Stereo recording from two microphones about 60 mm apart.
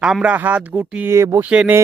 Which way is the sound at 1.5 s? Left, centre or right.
Right.